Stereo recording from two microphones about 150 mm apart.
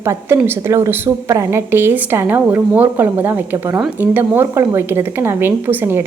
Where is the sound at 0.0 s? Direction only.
15° right (ahead or behind).